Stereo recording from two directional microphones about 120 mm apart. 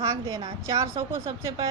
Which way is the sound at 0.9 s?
45° right (ahead or behind).